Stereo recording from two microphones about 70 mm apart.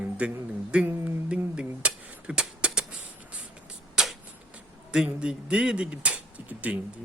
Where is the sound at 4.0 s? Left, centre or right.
Centre.